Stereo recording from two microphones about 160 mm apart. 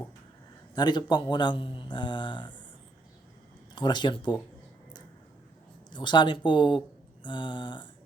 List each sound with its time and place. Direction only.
0.8 s speech: 25° left (ahead or behind)
3.8 s speech: 30° left (ahead or behind)
5.9 s speech: 30° left (ahead or behind)